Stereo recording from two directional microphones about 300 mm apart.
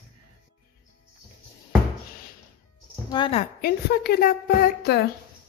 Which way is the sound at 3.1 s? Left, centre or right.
Centre.